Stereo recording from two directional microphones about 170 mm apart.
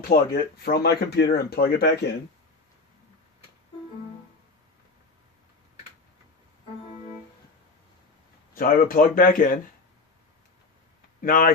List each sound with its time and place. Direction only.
0.1 s speech: 65° left (ahead or behind)
8.5 s speech: 55° left (ahead or behind)
11.2 s speech: 55° left (ahead or behind)